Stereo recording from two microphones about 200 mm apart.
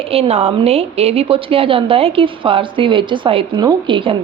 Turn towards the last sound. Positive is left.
turn(degrees=-25)  # may be behind; listen again after turning